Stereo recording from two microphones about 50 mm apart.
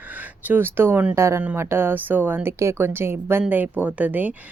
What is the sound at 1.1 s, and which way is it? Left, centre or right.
Speech, right.